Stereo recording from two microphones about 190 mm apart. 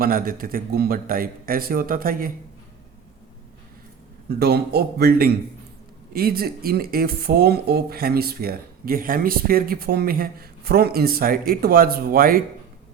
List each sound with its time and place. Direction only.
0.0 s speech: 50° right (ahead or behind)
4.3 s a man's voice: 55° right (ahead or behind)